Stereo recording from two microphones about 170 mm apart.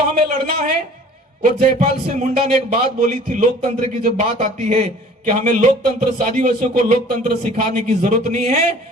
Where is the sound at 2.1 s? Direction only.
45° right (ahead or behind).